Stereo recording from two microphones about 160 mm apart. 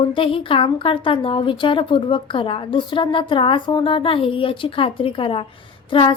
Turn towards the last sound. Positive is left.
turn(degrees=30)  # may be behind; listen again after turning